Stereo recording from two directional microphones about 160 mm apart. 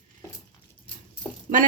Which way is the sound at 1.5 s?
55° right (ahead or behind).